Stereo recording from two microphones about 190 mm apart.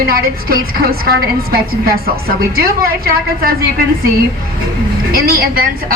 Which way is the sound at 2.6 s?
55° right (ahead or behind).